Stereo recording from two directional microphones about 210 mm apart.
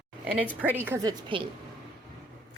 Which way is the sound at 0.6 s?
10° right (ahead or behind).